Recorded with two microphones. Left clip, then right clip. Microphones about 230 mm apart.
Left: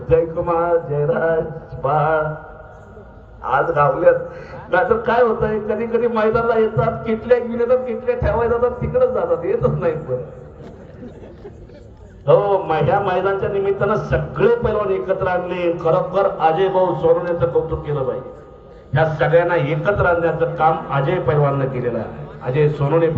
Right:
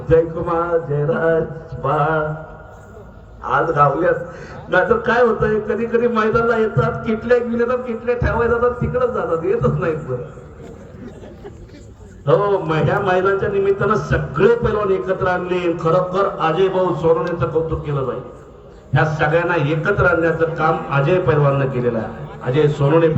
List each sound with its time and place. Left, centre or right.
0.1 s a man's voice: right
3.4 s a man's voice: right
12.2 s a man's voice: right
18.9 s a man's voice: right
22.5 s a man's voice: right